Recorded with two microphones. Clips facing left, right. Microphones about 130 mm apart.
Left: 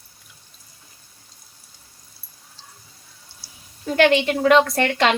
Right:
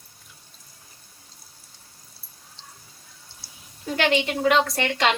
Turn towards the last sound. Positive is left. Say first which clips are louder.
# left 4 dB
turn(degrees=55)  # may be behind; listen again after turning